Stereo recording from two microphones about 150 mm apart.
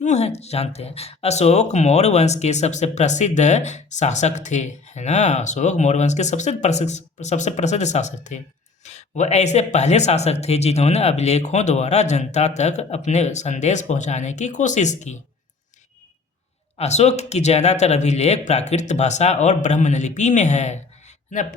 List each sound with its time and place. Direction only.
0.0 s speech: 50° left (ahead or behind)
16.7 s speech: 45° left (ahead or behind)